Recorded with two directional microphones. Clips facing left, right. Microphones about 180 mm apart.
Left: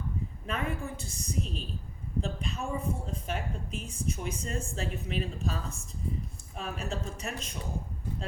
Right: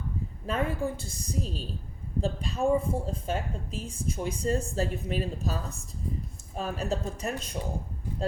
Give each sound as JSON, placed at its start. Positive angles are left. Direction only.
{"t": 0.4, "sound": "a woman's voice", "side_deg": -30}